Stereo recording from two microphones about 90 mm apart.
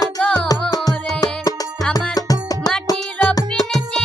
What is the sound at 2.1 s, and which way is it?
Music, 45° left (ahead or behind).